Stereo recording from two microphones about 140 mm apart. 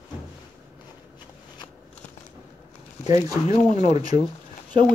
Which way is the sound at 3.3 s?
25° right (ahead or behind).